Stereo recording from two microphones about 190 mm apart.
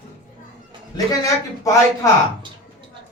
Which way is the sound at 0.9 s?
15° left (ahead or behind).